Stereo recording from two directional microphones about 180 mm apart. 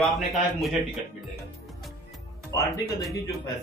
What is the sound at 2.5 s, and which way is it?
Speech, 20° left (ahead or behind).